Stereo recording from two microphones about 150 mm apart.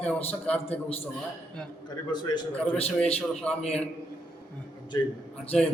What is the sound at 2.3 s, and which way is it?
Speech, 40° left (ahead or behind).